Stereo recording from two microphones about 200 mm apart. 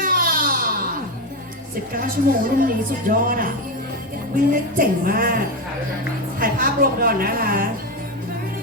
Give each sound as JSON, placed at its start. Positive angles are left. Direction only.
{"t": 0.0, "sound": "baby cry", "side_deg": -45}
{"t": 1.9, "sound": "a woman's voice", "side_deg": -45}
{"t": 6.4, "sound": "a woman's voice", "side_deg": -45}